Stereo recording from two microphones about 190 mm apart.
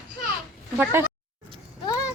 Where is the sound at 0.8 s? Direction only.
10° right (ahead or behind).